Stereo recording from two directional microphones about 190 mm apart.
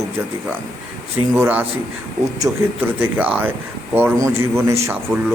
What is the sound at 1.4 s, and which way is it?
Speech, 10° right (ahead or behind).